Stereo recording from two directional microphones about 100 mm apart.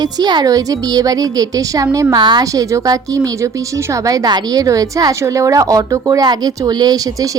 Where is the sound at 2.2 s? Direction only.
50° right (ahead or behind).